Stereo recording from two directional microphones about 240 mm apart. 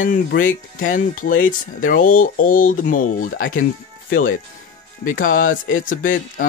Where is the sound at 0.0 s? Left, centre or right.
Left.